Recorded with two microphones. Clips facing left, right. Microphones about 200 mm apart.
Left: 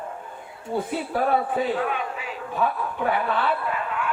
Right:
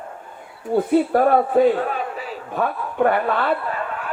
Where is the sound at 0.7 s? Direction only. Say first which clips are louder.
Right 9 dB; 55° right (ahead or behind).